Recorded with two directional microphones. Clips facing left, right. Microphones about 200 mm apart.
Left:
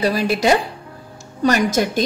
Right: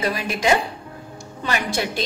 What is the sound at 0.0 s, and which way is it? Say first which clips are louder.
A woman's voice: left 5 dB; 35° left (ahead or behind).